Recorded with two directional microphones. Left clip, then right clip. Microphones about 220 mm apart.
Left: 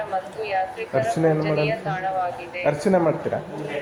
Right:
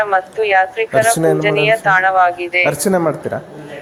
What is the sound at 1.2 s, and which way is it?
Speech, 65° right (ahead or behind).